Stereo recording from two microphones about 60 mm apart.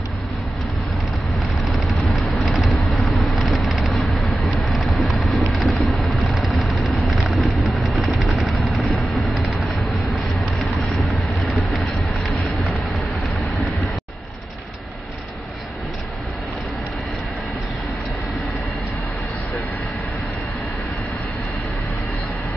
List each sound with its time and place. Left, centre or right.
1.6 s vehicle: centre
7.7 s a sound: centre
8.3 s vehicle: centre
13.6 s vehicle: centre